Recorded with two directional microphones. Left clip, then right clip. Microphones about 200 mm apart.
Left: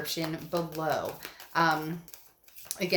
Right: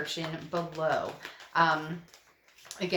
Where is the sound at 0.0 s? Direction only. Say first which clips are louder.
Left 1 dB; 40° left (ahead or behind).